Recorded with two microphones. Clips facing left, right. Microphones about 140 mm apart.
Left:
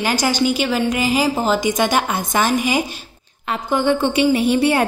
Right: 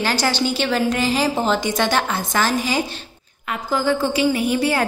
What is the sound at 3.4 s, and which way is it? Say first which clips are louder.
A woman's voice: left 3 dB; 25° left (ahead or behind).